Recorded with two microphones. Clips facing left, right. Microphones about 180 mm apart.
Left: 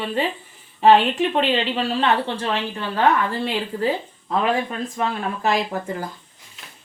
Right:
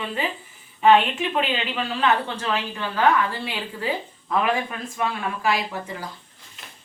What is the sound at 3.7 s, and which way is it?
Speech, 45° left (ahead or behind).